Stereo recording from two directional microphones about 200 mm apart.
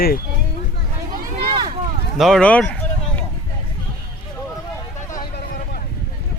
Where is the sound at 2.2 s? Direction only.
Centre (ahead or behind).